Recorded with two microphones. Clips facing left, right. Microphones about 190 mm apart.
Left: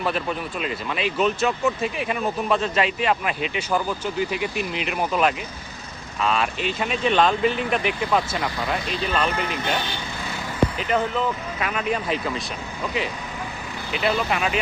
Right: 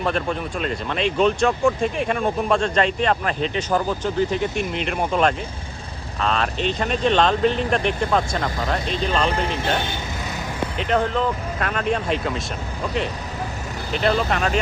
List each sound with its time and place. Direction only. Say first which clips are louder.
0.0 s speech: right 2 dB; 5° left (ahead or behind)
9.3 s speech: right 3 dB; 30° right (ahead or behind)
10.8 s speech: right 2 dB; 5° left (ahead or behind)
14.0 s speech: right 2 dB; 5° left (ahead or behind)